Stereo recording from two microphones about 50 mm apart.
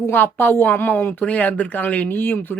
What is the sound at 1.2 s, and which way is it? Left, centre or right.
Speech, left.